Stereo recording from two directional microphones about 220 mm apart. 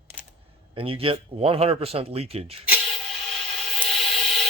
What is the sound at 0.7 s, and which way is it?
Speech, 25° right (ahead or behind).